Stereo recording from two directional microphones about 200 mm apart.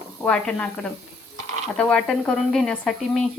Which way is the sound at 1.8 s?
5° left (ahead or behind).